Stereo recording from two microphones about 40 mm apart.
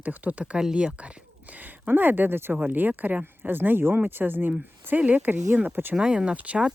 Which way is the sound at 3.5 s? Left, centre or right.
Right.